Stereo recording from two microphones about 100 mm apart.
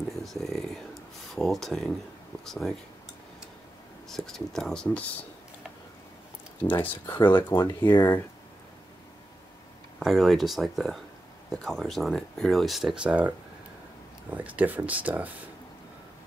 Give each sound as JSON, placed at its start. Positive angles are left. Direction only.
{"t": 0.2, "sound": "speech", "side_deg": 0}
{"t": 4.1, "sound": "speech", "side_deg": 5}
{"t": 6.6, "sound": "speech", "side_deg": 20}
{"t": 7.2, "sound": "speech", "side_deg": 55}
{"t": 7.9, "sound": "speech", "side_deg": 25}
{"t": 9.9, "sound": "speech", "side_deg": -5}
{"t": 14.3, "sound": "speech", "side_deg": -15}